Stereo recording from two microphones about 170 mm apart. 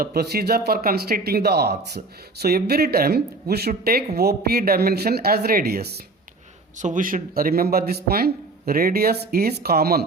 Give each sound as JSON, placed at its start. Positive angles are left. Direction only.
{"t": 0.0, "sound": "a man's voice", "side_deg": -65}
{"t": 6.7, "sound": "speech", "side_deg": -50}